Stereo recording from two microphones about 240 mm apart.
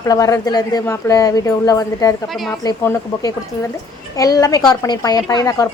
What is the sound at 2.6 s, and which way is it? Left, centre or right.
Speech, centre.